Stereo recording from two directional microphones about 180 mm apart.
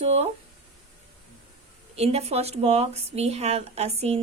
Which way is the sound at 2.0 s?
35° right (ahead or behind).